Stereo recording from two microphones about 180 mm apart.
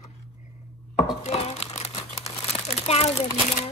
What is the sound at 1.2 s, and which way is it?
Crumpling, 35° left (ahead or behind).